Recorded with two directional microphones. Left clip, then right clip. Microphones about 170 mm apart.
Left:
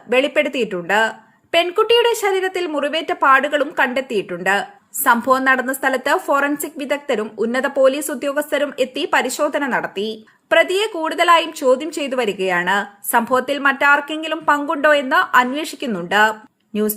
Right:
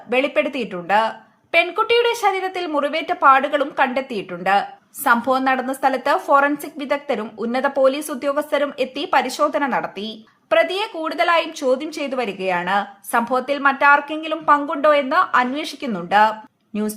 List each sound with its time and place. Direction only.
0.1 s a woman's voice: 15° left (ahead or behind)